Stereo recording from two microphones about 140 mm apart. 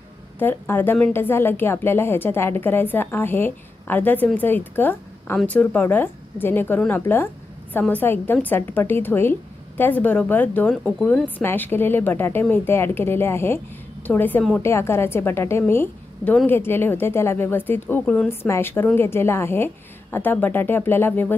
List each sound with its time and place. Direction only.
0.4 s a woman's voice: 15° left (ahead or behind)
10.7 s speech: centre (ahead or behind)
11.2 s a woman's voice: 15° left (ahead or behind)